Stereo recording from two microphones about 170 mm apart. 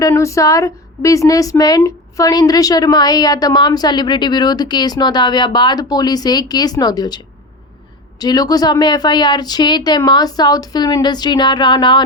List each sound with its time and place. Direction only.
0.0 s a woman's voice: 15° left (ahead or behind)
8.2 s a woman's voice: 25° left (ahead or behind)